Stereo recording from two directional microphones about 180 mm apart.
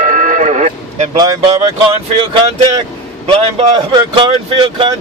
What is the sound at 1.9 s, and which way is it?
Speech, 25° right (ahead or behind).